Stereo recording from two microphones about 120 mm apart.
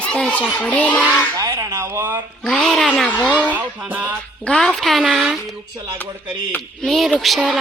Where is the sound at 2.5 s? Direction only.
5° left (ahead or behind).